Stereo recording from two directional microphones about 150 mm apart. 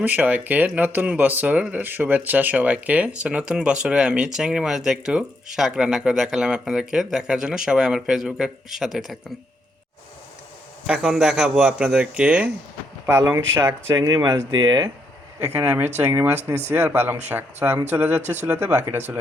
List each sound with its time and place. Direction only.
0.0 s speech: 10° right (ahead or behind)
10.8 s speech: 5° right (ahead or behind); by 14.8 s 30° right (ahead or behind)
15.4 s speech: 15° right (ahead or behind)